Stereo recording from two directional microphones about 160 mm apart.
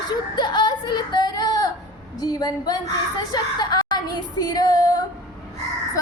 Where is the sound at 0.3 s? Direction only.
25° left (ahead or behind).